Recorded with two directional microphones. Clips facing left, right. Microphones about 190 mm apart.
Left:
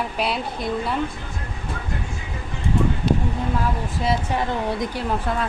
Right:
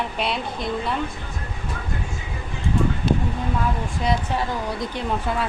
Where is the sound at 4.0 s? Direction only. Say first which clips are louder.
Left 1 dB; 5° left (ahead or behind).